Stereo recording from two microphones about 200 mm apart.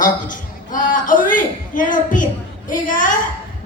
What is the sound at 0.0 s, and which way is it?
A man's voice, 40° left (ahead or behind).